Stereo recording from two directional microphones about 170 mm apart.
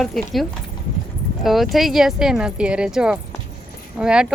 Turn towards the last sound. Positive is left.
turn(degrees=-5)  # may be behind; listen again after turning